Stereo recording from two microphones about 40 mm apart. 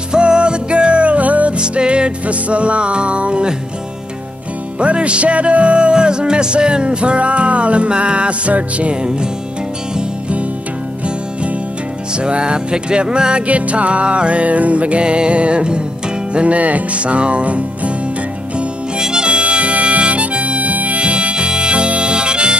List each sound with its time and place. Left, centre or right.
0.1 s music: right
1.6 s music: right
4.7 s music: right
12.2 s music: right
13.5 s music: right
18.9 s harmonica: centre